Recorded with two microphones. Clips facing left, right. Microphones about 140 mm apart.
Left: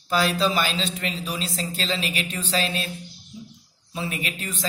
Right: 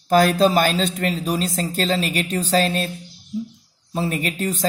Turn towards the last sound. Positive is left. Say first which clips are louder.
# right 8 dB
turn(degrees=-40)  # may be behind; listen again after turning